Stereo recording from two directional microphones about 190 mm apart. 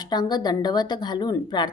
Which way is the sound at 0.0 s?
20° left (ahead or behind).